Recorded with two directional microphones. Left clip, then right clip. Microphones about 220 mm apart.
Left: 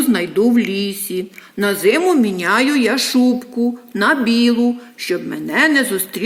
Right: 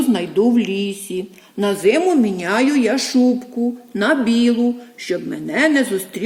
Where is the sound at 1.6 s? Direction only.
15° left (ahead or behind).